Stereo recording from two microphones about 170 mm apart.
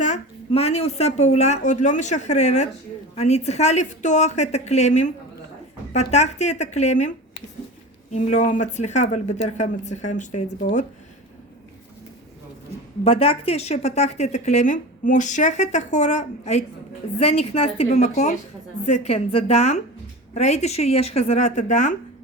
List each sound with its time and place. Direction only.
0.0 s a woman's voice: 40° left (ahead or behind)
8.1 s a woman's voice: 45° left (ahead or behind)
13.1 s a woman's voice: 35° left (ahead or behind)